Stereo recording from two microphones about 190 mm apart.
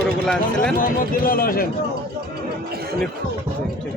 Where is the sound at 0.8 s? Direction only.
50° left (ahead or behind).